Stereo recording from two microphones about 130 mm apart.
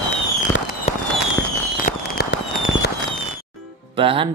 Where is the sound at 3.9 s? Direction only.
45° right (ahead or behind).